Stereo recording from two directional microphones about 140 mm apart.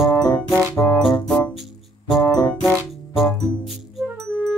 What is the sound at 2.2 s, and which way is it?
Music, 25° left (ahead or behind).